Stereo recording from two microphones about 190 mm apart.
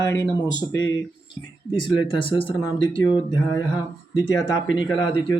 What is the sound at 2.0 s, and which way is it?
Speech, 25° left (ahead or behind).